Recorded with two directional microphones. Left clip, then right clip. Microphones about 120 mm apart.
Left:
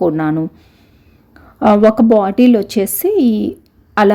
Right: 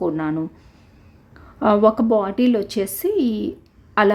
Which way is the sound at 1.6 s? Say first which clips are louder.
Left 6 dB; 25° left (ahead or behind).